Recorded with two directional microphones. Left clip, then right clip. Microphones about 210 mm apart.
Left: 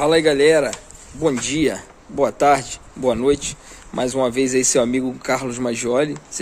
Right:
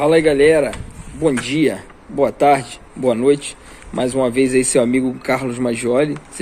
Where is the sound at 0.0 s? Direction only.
10° left (ahead or behind).